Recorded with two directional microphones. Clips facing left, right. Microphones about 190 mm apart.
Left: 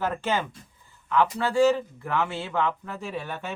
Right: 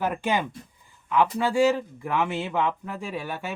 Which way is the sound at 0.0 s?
15° right (ahead or behind).